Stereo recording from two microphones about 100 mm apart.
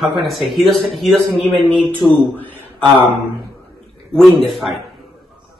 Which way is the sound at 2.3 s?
20° left (ahead or behind).